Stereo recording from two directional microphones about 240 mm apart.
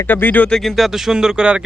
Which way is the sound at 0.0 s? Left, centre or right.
Centre.